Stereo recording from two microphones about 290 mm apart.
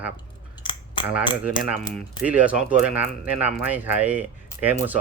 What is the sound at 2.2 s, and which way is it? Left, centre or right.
Speech, centre.